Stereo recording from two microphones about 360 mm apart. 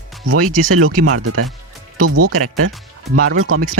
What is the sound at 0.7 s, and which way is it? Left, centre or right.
Speech, right.